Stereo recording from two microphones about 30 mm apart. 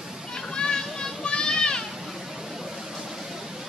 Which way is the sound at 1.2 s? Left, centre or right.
Left.